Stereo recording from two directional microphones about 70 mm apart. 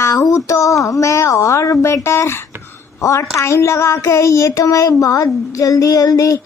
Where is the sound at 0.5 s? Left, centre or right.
Left.